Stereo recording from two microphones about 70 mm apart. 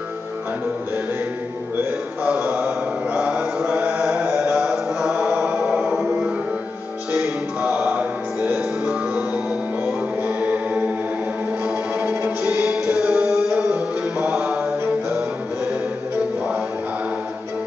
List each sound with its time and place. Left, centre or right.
2.2 s mantra: centre
4.3 s music: centre
9.8 s music: right